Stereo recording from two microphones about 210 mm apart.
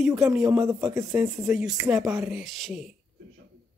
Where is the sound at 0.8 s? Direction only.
15° right (ahead or behind).